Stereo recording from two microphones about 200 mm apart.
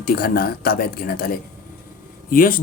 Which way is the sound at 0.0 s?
50° left (ahead or behind).